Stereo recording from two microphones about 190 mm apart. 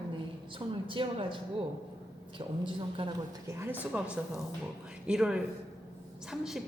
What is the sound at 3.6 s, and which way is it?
A woman's voice, 10° right (ahead or behind).